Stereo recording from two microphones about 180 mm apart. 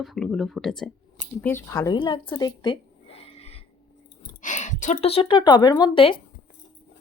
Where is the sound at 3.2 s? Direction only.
35° left (ahead or behind).